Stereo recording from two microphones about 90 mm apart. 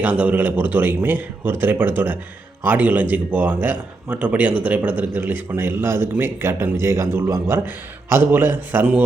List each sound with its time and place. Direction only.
0.0 s a man's voice: 15° right (ahead or behind)